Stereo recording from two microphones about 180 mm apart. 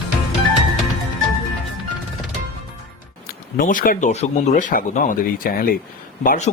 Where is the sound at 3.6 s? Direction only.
50° left (ahead or behind).